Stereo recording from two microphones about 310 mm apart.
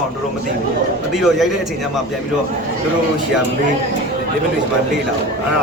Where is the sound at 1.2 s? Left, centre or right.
Centre.